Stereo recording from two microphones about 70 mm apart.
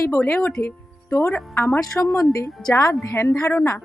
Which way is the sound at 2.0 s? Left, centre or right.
Left.